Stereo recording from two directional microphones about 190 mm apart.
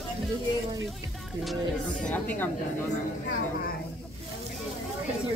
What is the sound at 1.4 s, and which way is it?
Speech, 5° left (ahead or behind).